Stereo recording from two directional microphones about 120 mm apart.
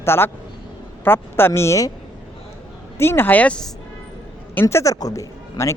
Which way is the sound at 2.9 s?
20° left (ahead or behind).